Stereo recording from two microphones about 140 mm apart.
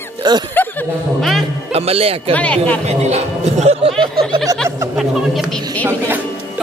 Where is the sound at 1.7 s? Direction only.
45° right (ahead or behind).